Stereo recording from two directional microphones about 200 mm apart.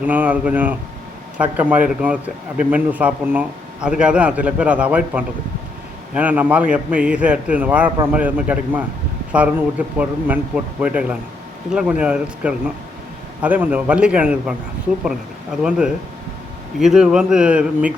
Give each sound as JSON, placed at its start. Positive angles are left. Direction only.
{"t": 0.0, "sound": "a man's voice", "side_deg": -5}
{"t": 16.8, "sound": "a man's voice", "side_deg": -5}